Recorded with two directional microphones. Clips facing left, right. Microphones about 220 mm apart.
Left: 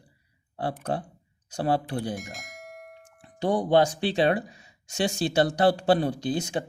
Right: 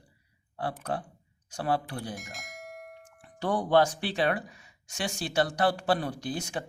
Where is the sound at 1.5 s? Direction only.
25° left (ahead or behind).